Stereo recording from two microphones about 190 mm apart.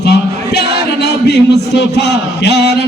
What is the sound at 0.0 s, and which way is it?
Speech, 60° left (ahead or behind).